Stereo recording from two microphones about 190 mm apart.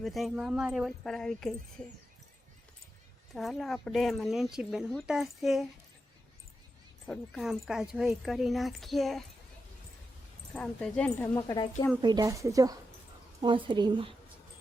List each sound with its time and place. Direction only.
0.0 s speech: centre (ahead or behind)
3.3 s speech: centre (ahead or behind)
7.1 s speech: centre (ahead or behind)
10.5 s speech: 5° left (ahead or behind)
12.0 s a woman's voice: 20° right (ahead or behind)